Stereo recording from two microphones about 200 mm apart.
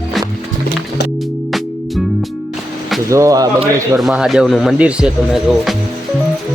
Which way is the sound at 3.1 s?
15° right (ahead or behind).